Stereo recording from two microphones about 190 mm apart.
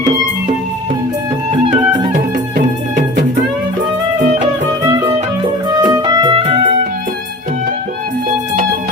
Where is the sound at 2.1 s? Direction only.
45° right (ahead or behind).